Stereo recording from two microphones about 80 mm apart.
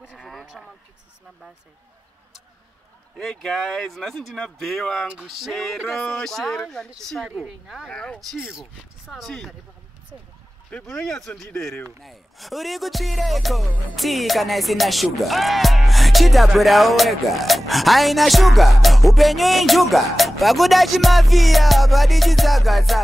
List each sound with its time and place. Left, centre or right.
0.0 s a sound: centre
3.2 s speech: centre
7.2 s speech: centre
7.9 s speech: centre
8.4 s speech: centre
9.1 s speech: centre
10.7 s speech: centre
11.4 s speech: left
12.0 s speech: centre